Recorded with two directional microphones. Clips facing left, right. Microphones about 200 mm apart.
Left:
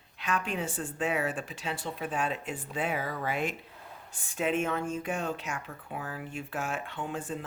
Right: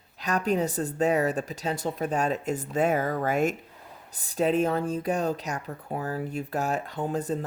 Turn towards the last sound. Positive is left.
turn(degrees=-40)  # may be behind; listen again after turning